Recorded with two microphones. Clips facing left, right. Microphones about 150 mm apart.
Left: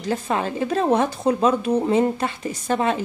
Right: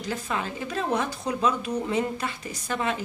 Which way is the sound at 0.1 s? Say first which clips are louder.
Left 8 dB; 50° left (ahead or behind).